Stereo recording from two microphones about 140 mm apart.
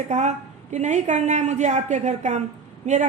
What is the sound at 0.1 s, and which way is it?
A woman's voice, 55° right (ahead or behind).